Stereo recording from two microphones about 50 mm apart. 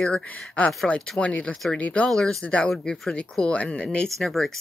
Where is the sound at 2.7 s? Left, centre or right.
Centre.